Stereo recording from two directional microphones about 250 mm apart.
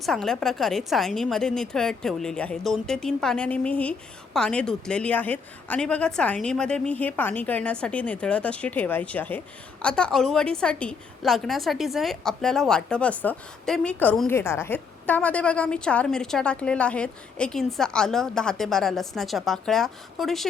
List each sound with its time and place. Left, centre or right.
0.0 s a woman's voice: centre